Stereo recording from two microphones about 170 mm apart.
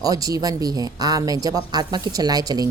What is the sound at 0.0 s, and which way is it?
A woman's voice, 20° right (ahead or behind).